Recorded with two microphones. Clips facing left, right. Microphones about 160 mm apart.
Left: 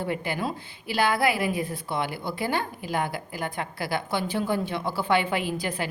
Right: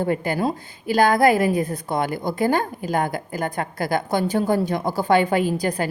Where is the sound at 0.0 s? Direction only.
45° right (ahead or behind).